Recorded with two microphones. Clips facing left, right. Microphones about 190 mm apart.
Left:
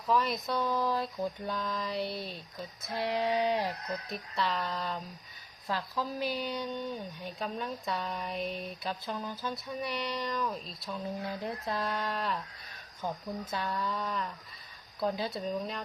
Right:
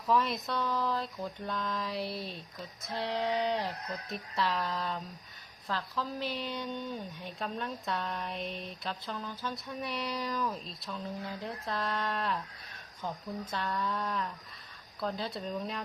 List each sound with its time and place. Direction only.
0.1 s speech: centre (ahead or behind)
0.5 s speech: 15° left (ahead or behind)
2.9 s speech: 10° left (ahead or behind)
4.1 s speech: centre (ahead or behind)
5.6 s speech: 10° left (ahead or behind)
10.8 s speech: 15° left (ahead or behind)
13.5 s speech: 5° left (ahead or behind)
15.0 s speech: 10° left (ahead or behind)